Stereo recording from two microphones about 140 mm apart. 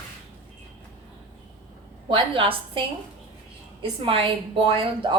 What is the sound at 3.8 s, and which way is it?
A woman's voice, 40° right (ahead or behind).